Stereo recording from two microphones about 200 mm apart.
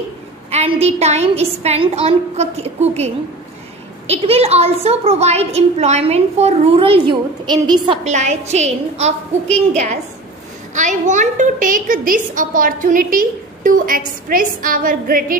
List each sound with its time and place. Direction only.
0.5 s a child's voice: 30° right (ahead or behind)
4.1 s a child's voice: 30° right (ahead or behind)
8.0 s a child's voice: 35° right (ahead or behind)
10.7 s a woman's voice: 40° right (ahead or behind)